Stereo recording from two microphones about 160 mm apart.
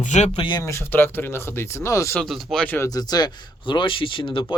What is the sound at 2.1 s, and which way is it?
Speech, centre (ahead or behind).